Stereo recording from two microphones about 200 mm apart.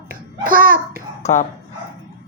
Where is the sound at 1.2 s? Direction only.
35° left (ahead or behind).